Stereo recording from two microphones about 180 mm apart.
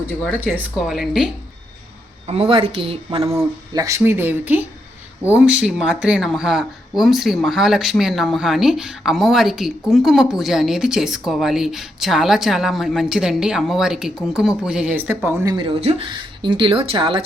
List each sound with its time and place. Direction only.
0.3 s speech: 10° right (ahead or behind)
2.2 s a woman's voice: 35° right (ahead or behind)
3.3 s speech: 15° right (ahead or behind)
15.5 s speech: 30° right (ahead or behind)